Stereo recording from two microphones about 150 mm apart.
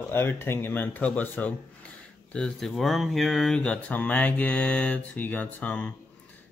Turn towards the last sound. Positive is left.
turn(degrees=10)  # may be behind; listen again after turning